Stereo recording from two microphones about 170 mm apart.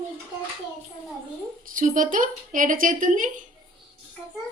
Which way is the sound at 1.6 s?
50° right (ahead or behind).